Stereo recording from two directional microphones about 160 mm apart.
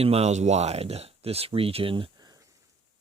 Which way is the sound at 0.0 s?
40° right (ahead or behind).